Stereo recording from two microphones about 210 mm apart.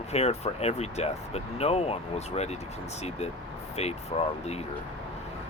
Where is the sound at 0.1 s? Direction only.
30° left (ahead or behind).